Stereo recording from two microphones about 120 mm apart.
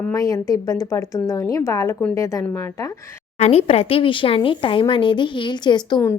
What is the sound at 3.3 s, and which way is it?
Speech, 60° left (ahead or behind).